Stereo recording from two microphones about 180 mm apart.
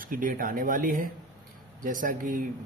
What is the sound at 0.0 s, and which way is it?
A man's voice, 50° right (ahead or behind).